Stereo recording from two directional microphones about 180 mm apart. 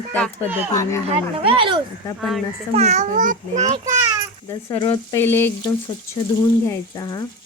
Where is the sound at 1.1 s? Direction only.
30° right (ahead or behind).